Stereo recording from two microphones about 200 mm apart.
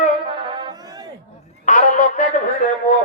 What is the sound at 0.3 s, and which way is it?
Music, 25° right (ahead or behind).